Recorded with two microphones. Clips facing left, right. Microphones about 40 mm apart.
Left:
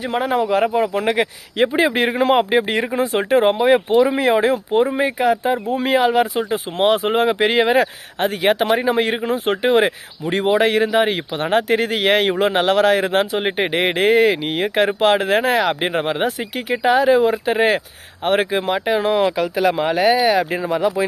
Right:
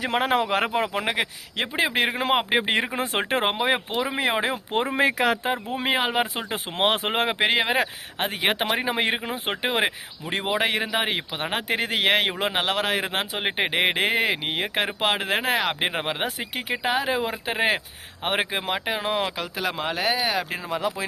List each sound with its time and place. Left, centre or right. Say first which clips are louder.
0.1 s speech: left 5 dB; right
1.0 s speech: left 7 dB; centre
2.5 s speech: left 5 dB; right
3.0 s speech: left 8 dB; right
3.6 s speech: left 9 dB; centre
3.9 s speech: left 10 dB; centre
4.3 s speech: left 9 dB; centre
4.7 s speech: left 7 dB; right
4.9 s speech: left 3 dB; right
5.3 s speech: left 7 dB; right
5.7 s speech: left 8 dB; right
6.5 s speech: left 6 dB; right
7.3 s speech: left 6 dB; centre